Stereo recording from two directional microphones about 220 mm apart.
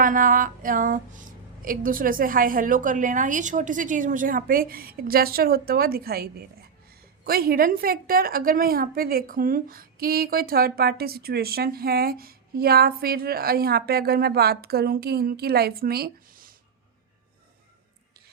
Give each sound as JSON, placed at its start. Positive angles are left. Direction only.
{"t": 0.0, "sound": "a woman's voice", "side_deg": -40}